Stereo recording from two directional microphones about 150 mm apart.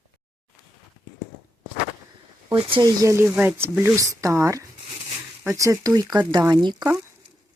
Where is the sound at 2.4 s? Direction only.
35° right (ahead or behind).